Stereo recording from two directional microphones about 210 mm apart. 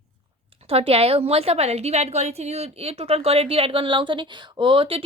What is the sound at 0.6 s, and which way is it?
A woman's voice, 30° right (ahead or behind).